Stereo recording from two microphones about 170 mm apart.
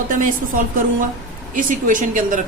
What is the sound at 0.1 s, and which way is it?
Speech, 50° right (ahead or behind).